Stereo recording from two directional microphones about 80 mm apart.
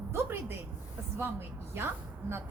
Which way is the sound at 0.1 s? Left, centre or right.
Right.